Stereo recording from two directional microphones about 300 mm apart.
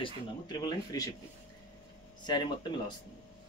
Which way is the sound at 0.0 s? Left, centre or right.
Centre.